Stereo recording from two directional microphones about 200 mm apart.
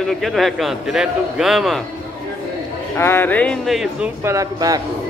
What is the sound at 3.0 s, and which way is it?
A man's voice, 10° left (ahead or behind).